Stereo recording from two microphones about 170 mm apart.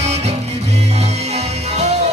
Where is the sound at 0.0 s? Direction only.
40° right (ahead or behind).